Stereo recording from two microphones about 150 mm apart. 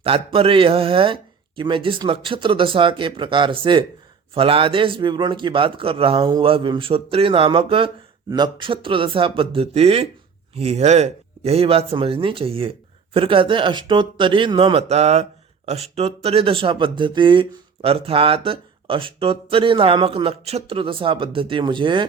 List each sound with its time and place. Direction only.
0.0 s speech: 40° right (ahead or behind)